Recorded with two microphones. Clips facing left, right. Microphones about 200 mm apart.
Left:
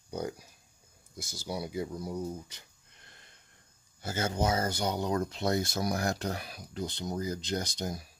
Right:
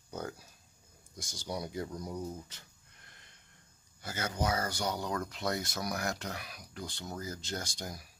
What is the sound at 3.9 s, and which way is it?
Speech, 25° left (ahead or behind).